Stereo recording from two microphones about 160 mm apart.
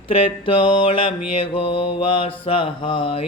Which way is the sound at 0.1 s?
35° left (ahead or behind).